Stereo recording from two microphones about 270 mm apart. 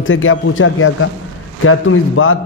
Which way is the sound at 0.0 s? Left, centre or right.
Left.